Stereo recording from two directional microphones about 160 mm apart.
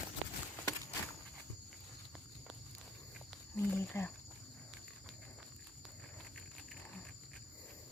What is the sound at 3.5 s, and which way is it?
Cricket, 15° left (ahead or behind).